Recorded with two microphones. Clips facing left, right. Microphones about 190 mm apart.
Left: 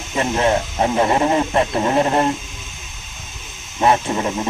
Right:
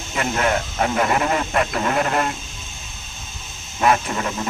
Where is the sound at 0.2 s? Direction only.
25° left (ahead or behind).